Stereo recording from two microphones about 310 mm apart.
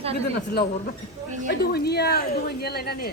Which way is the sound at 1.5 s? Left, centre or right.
Left.